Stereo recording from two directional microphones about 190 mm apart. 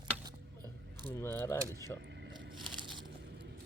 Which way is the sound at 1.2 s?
15° left (ahead or behind).